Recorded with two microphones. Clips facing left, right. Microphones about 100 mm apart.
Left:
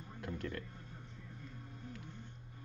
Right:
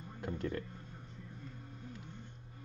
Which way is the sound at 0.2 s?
25° right (ahead or behind).